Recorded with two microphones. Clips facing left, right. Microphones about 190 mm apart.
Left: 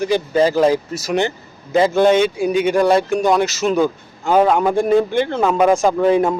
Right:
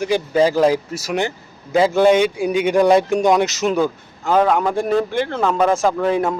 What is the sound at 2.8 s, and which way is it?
Speech, centre (ahead or behind).